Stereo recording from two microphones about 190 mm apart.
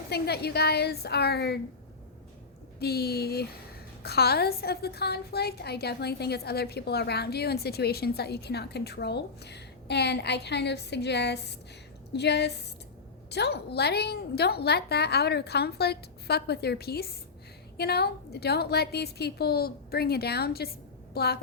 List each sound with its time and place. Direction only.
0.1 s a woman's voice: 60° left (ahead or behind)
2.7 s a woman's voice: 55° left (ahead or behind)